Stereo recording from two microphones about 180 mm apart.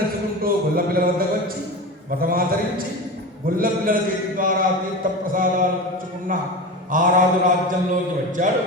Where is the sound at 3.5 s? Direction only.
50° right (ahead or behind).